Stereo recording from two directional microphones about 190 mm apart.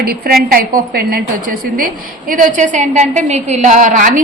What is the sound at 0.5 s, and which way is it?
Speech, 50° right (ahead or behind).